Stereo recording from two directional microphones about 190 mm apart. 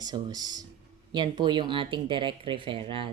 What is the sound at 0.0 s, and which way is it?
Speech, 20° right (ahead or behind).